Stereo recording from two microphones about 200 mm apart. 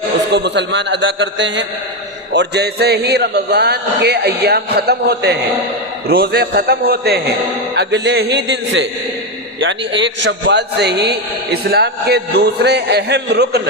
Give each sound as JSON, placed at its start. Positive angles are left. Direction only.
{"t": 0.3, "sound": "a man's voice", "side_deg": -60}